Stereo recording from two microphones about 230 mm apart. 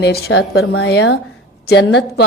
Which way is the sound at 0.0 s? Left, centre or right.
Left.